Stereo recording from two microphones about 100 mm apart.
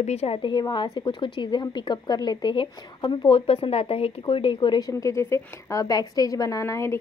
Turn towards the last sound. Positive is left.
turn(degrees=30)  # may be behind; listen again after turning